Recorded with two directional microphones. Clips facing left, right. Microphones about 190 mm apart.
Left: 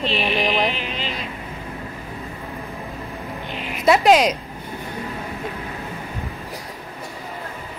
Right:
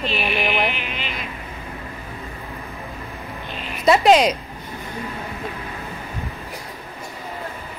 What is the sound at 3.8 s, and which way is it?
Speech, centre (ahead or behind).